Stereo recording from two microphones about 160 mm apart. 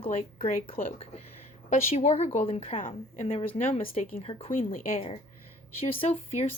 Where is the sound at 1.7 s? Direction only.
45° left (ahead or behind).